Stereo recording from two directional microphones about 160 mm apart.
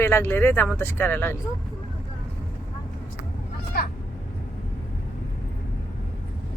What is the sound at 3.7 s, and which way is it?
Vehicle, 80° left.